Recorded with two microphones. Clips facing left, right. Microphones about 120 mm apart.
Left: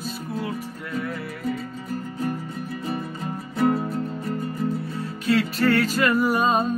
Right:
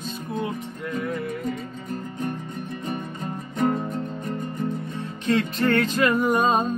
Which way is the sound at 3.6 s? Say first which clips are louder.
Left 2 dB; 5° left (ahead or behind).